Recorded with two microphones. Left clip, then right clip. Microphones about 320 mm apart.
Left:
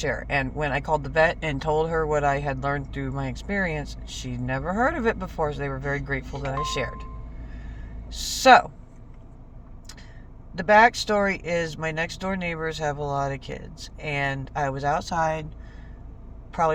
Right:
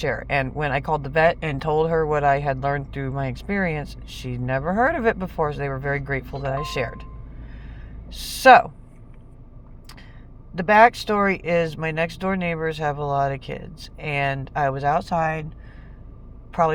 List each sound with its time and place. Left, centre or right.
0.1 s speech: centre
8.2 s speech: centre
10.5 s speech: centre
16.5 s speech: centre